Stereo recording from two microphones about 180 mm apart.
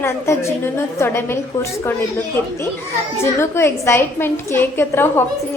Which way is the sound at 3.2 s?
15° left (ahead or behind).